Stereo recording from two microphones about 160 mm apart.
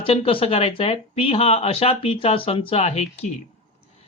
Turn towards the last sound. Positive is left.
turn(degrees=40)  # may be behind; listen again after turning